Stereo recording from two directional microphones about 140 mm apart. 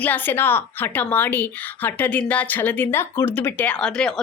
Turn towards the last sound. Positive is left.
turn(degrees=5)  # may be behind; listen again after turning